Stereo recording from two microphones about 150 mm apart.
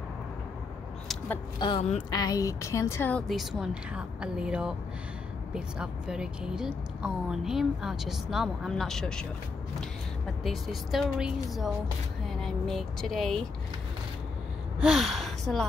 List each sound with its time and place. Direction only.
1.6 s a woman's voice: 30° left (ahead or behind); by 9.2 s 5° left (ahead or behind)
10.4 s a woman's voice: centre (ahead or behind)
14.8 s speech: 5° right (ahead or behind)